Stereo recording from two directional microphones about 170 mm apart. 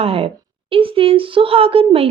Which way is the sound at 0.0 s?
35° right (ahead or behind).